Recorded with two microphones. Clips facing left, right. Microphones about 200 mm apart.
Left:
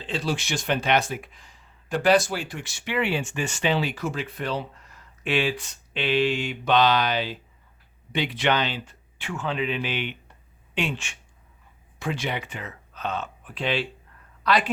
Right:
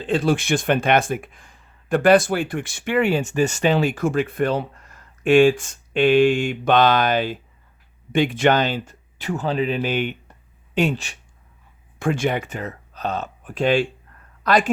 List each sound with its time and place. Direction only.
0.0 s speech: 50° right (ahead or behind); by 11.2 s 35° right (ahead or behind)
11.9 s a woman's voice: 50° right (ahead or behind)